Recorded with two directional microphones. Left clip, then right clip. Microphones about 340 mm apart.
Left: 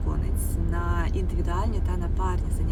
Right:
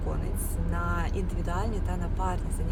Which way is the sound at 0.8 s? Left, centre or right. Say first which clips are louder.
Even; centre.